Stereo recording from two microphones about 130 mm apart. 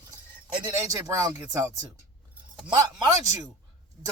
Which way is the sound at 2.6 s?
30° right (ahead or behind).